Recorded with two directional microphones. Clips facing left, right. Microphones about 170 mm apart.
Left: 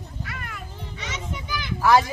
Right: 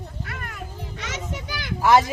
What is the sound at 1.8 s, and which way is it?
Speech, 20° right (ahead or behind).